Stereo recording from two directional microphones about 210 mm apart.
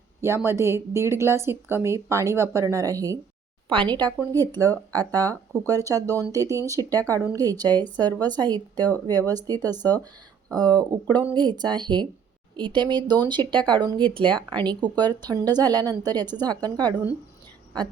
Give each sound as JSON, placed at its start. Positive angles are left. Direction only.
{"t": 0.2, "sound": "a woman's voice", "side_deg": -10}